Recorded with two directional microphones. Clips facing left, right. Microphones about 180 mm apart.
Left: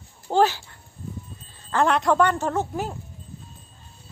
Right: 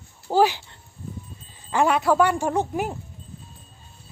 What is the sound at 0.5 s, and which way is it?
Dog, 25° right (ahead or behind).